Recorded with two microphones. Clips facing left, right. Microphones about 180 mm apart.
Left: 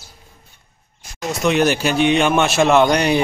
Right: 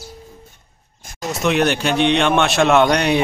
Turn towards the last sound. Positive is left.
turn(degrees=0)  # may be behind; listen again after turning